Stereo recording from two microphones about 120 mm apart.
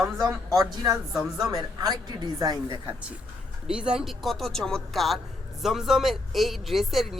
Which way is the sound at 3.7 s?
5° right (ahead or behind).